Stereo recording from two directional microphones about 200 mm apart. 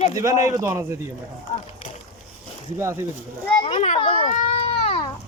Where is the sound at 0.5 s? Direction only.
10° right (ahead or behind).